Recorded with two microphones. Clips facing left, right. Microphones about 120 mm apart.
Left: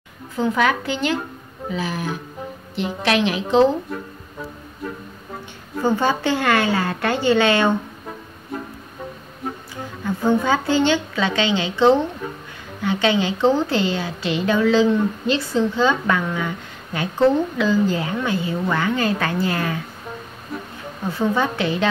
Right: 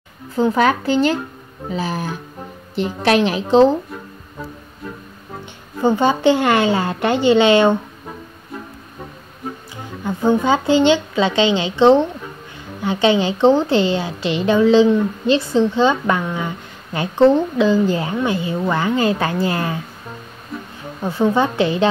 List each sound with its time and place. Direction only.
0.4 s a woman's voice: 35° right (ahead or behind)
5.9 s a woman's voice: 20° right (ahead or behind)
10.0 s a woman's voice: 20° right (ahead or behind)
21.4 s a woman's voice: 25° right (ahead or behind)